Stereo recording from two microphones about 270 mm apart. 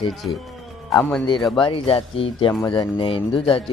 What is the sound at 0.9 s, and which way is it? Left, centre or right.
Speech, centre.